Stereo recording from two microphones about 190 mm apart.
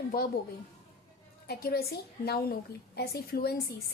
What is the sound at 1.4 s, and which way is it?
A woman's voice, 55° left (ahead or behind).